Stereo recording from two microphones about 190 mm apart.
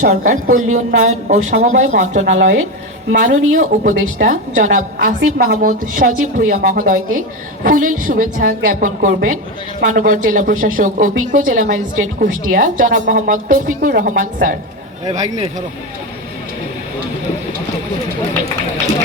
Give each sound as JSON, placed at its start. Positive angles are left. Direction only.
{"t": 0.0, "sound": "a woman's voice", "side_deg": -40}